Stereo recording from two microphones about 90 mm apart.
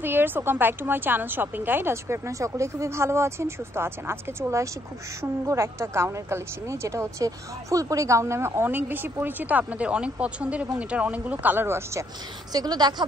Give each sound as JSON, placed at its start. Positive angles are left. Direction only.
{"t": 0.0, "sound": "a woman's voice", "side_deg": -25}
{"t": 12.5, "sound": "speech", "side_deg": -50}